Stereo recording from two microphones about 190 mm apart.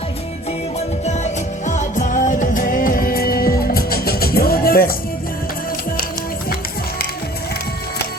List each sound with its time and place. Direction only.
1.0 s music: 35° left (ahead or behind); by 4.9 s 50° left (ahead or behind)